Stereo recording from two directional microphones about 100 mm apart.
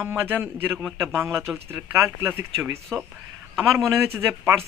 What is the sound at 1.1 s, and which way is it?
Speech, 25° right (ahead or behind).